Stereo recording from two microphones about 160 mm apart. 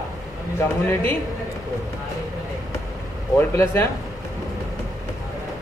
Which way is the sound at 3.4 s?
15° left (ahead or behind).